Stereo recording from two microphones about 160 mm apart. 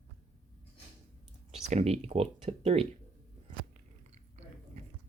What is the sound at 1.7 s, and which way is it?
Speech, 40° right (ahead or behind).